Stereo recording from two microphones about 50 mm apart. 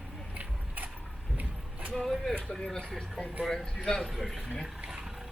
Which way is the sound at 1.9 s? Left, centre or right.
Centre.